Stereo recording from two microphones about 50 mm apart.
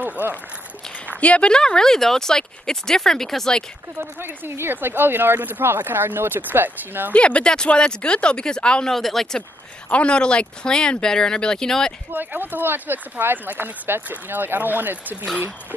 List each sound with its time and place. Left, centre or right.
0.0 s a sound: right
1.2 s speech: left; by 3.5 s centre
4.0 s speech: right
7.1 s speech: left
8.9 s speech: centre
9.8 s speech: left
12.1 s speech: right